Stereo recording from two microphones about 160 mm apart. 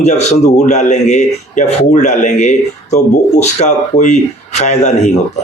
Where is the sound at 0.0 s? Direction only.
45° left (ahead or behind).